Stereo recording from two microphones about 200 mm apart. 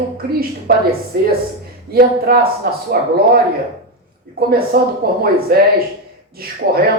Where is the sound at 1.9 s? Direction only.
50° right (ahead or behind).